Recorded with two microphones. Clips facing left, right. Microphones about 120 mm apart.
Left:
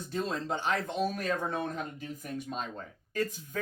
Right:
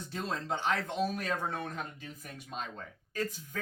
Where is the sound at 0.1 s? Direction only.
45° left (ahead or behind).